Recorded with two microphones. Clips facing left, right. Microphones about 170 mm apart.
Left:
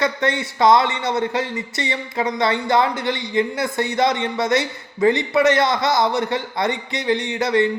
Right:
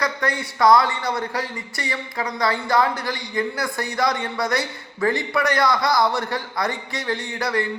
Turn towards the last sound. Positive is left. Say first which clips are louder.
# left 5 dB
turn(degrees=20)  # may be behind; listen again after turning